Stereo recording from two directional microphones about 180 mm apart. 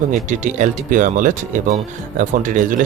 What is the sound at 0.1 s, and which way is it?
Speech, 45° right (ahead or behind).